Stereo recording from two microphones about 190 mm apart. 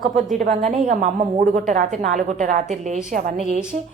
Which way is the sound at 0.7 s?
40° right (ahead or behind).